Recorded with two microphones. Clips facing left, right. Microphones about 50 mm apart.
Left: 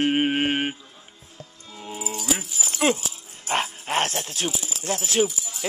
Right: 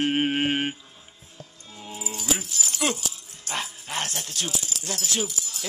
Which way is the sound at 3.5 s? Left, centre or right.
Left.